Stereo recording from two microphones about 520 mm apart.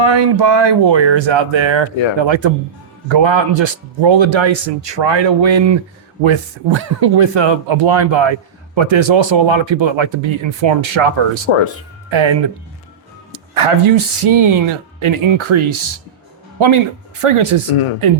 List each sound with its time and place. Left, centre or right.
0.0 s speech: right
11.5 s speech: left
13.3 s speech: right